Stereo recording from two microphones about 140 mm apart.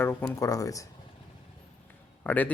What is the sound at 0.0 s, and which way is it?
Speech, 15° left (ahead or behind).